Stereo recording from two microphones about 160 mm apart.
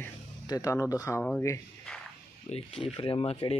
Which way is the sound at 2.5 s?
45° left (ahead or behind).